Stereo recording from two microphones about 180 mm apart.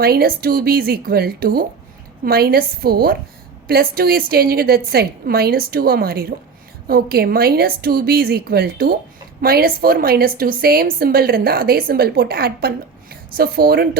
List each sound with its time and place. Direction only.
0.0 s a woman's voice: 55° right (ahead or behind)